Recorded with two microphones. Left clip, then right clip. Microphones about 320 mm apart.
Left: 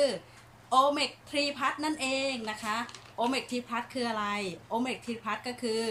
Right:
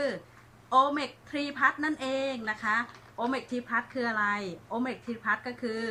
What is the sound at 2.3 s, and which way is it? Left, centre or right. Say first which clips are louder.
Speech: right 3 dB; centre.